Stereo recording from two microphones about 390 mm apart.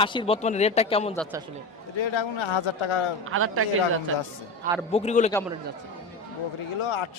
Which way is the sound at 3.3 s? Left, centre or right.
Right.